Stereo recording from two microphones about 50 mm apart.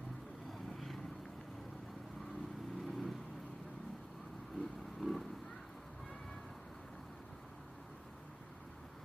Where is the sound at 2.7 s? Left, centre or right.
Centre.